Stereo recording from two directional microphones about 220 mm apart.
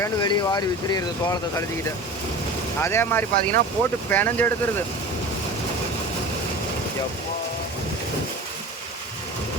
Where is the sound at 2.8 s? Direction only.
10° left (ahead or behind).